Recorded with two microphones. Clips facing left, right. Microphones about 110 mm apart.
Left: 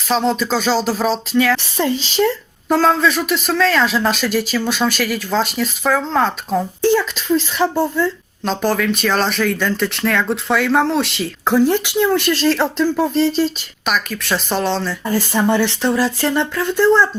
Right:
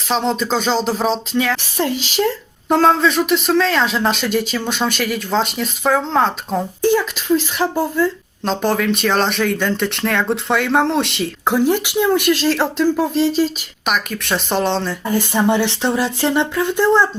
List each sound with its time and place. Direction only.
0.3 s speech: 20° right (ahead or behind)
2.7 s speech: 25° right (ahead or behind)
8.4 s speech: 25° right (ahead or behind)
11.4 s speech: 10° right (ahead or behind)